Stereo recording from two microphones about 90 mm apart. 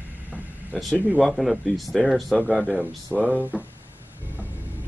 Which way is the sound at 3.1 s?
30° left (ahead or behind).